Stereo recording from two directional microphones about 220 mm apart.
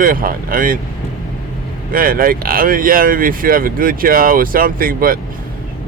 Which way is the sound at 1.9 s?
40° right (ahead or behind).